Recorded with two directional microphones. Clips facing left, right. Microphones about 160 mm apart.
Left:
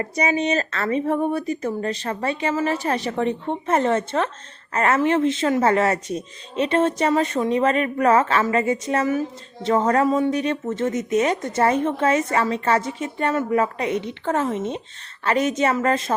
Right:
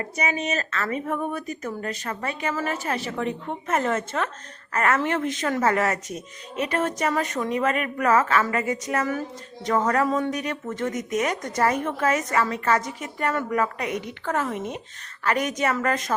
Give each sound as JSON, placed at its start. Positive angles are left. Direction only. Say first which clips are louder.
{"t": 0.2, "sound": "speech", "louder": "left 6 dB", "side_deg": 35}